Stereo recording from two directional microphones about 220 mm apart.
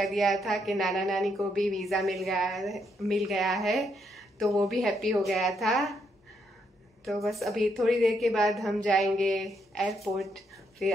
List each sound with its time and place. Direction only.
0.0 s a woman's voice: centre (ahead or behind)
7.1 s a woman's voice: centre (ahead or behind)